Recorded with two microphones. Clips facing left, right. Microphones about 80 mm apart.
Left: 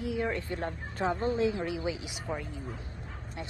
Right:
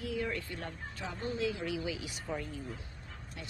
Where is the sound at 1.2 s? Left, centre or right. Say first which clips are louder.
Left 2 dB; left.